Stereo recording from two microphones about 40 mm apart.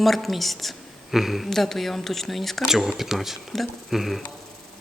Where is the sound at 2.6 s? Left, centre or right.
Centre.